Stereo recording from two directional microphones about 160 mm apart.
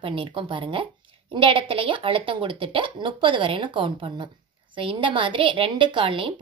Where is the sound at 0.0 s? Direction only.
35° right (ahead or behind).